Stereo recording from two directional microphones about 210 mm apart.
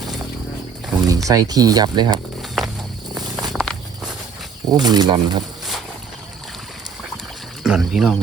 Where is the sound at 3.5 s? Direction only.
Centre (ahead or behind).